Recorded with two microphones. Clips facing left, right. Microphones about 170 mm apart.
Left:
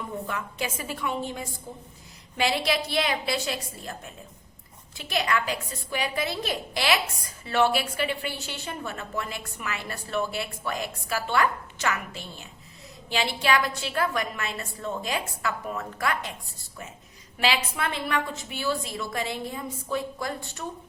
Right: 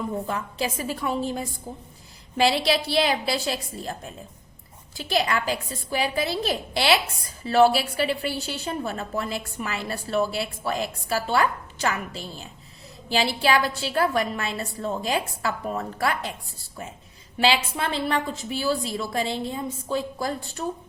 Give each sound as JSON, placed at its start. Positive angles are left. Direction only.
{"t": 0.3, "sound": "a woman's voice", "side_deg": -35}
{"t": 4.9, "sound": "a woman's voice", "side_deg": -35}
{"t": 17.3, "sound": "a woman's voice", "side_deg": -30}